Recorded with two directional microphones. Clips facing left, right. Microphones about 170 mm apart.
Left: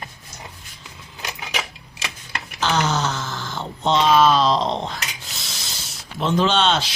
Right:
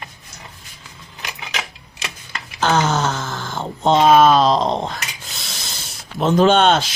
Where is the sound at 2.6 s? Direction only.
50° right (ahead or behind).